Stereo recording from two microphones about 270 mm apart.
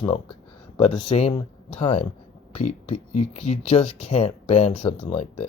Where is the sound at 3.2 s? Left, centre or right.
Left.